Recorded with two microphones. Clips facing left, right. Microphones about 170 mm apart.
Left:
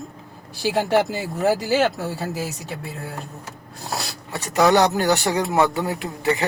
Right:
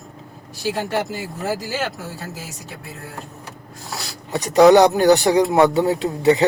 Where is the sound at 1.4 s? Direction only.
65° left (ahead or behind).